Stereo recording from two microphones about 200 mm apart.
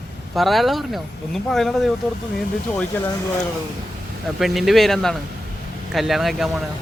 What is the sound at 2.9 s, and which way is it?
Speech, 10° left (ahead or behind).